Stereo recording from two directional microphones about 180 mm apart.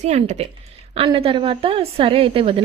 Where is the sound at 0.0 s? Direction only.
40° right (ahead or behind).